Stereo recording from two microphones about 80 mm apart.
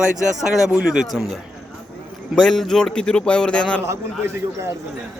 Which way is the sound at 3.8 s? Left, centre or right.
Right.